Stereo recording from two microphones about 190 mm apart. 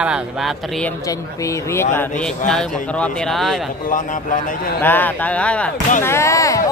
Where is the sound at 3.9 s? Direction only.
40° left (ahead or behind).